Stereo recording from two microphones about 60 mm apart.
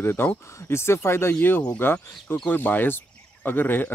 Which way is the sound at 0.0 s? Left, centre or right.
Left.